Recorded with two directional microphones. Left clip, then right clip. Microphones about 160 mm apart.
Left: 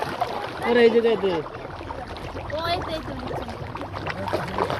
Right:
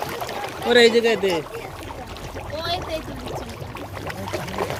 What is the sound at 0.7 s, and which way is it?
Speech, 25° right (ahead or behind).